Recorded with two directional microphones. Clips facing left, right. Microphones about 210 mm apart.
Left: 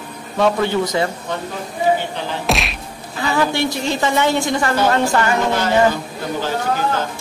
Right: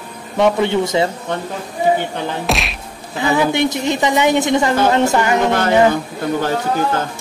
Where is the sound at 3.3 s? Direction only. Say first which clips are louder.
Right 3 dB; 20° right (ahead or behind).